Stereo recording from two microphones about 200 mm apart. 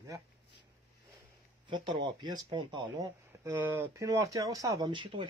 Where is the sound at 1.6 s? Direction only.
25° right (ahead or behind).